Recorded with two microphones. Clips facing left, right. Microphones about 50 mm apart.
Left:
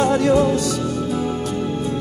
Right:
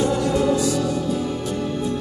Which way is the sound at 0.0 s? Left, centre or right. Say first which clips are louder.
Left 4 dB; left.